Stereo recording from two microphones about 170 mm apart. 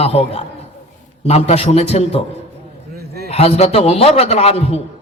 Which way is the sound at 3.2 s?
35° left (ahead or behind).